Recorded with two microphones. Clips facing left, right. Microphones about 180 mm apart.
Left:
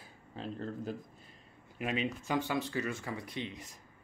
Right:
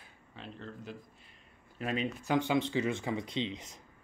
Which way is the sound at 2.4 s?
20° right (ahead or behind).